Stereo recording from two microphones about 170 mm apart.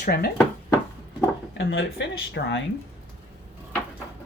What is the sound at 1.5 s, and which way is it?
Speech, 90° left.